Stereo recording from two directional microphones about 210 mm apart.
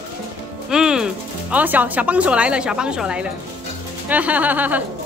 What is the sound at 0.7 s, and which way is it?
Speech, 5° right (ahead or behind).